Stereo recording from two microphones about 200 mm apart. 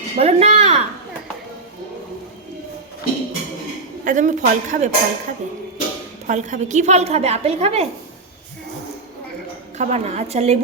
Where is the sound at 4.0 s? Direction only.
40° right (ahead or behind).